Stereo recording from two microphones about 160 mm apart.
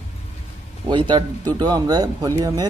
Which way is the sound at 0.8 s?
25° right (ahead or behind).